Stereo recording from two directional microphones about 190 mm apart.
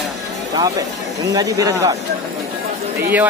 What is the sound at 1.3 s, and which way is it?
Speech, 20° right (ahead or behind).